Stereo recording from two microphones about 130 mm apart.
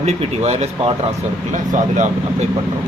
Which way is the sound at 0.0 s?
55° right (ahead or behind).